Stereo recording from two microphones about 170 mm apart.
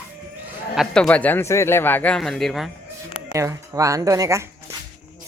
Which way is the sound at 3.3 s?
20° right (ahead or behind).